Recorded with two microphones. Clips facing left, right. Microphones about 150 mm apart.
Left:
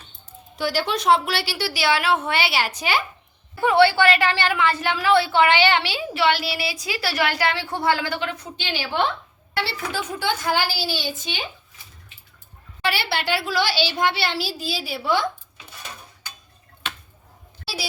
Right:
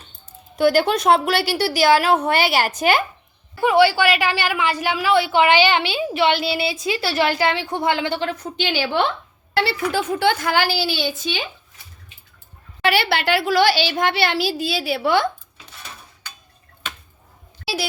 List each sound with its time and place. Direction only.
0.5 s a woman's voice: 55° right (ahead or behind)
3.6 s a woman's voice: 15° right (ahead or behind); by 8.4 s 30° right (ahead or behind)
9.6 s a woman's voice: 60° right (ahead or behind)
12.9 s a woman's voice: 60° right (ahead or behind)